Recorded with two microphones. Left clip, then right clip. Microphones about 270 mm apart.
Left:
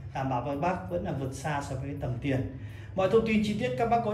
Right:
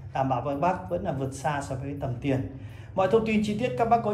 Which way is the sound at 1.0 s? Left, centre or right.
Centre.